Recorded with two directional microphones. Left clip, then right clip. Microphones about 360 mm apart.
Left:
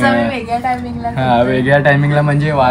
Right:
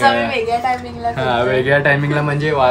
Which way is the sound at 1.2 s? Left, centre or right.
Centre.